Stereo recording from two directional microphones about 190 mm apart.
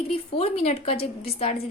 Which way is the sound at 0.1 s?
30° left (ahead or behind).